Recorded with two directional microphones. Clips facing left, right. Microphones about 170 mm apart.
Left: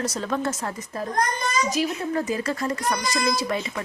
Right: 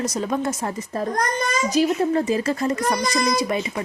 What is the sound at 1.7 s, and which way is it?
A woman's voice, 35° right (ahead or behind).